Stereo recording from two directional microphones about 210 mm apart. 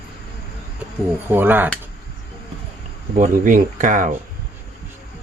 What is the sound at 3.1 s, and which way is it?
Speech, 40° right (ahead or behind).